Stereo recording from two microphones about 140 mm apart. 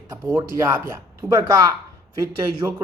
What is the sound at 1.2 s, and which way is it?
Speech, 25° right (ahead or behind).